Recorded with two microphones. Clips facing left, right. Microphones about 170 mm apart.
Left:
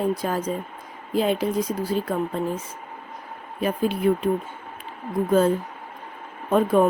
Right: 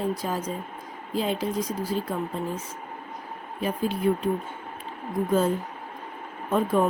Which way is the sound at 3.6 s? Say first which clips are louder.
Left 4 dB; 65° left (ahead or behind).